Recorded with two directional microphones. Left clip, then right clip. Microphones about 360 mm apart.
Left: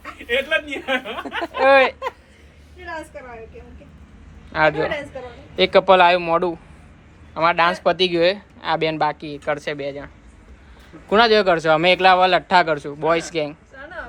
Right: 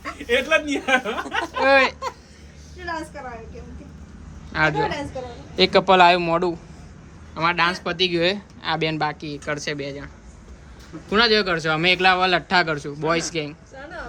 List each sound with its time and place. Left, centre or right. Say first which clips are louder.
0.3 s a man's voice: right 1 dB; right
1.7 s a man's voice: left 2 dB; centre
4.5 s a man's voice: left 3 dB; centre
11.1 s a man's voice: left 4 dB; centre